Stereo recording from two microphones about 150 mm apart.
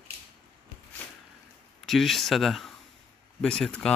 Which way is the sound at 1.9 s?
Centre (ahead or behind).